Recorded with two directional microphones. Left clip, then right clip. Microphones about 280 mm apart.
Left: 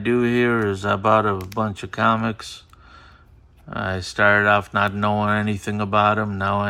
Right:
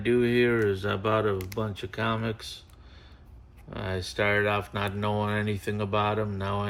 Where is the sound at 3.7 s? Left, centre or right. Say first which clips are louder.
Left 7 dB; left.